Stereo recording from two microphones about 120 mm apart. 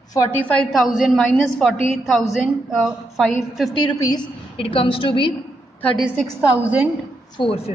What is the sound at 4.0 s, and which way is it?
Speech, 30° left (ahead or behind).